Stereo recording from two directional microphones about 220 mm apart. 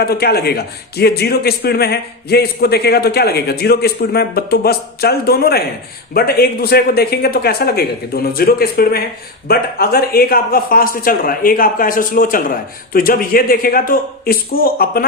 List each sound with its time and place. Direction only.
0.0 s a man's voice: 45° left (ahead or behind)